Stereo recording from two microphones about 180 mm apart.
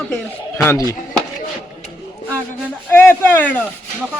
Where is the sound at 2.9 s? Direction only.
10° left (ahead or behind).